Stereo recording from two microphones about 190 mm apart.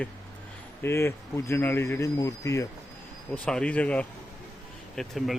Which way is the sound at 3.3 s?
5° left (ahead or behind).